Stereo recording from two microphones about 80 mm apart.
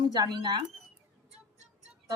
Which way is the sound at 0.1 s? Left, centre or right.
Right.